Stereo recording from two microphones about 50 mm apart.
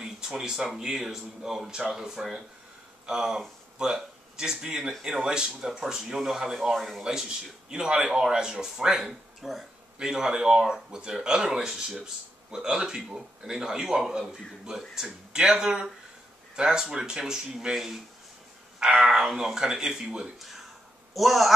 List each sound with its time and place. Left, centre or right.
0.0 s speech: centre
21.1 s speech: centre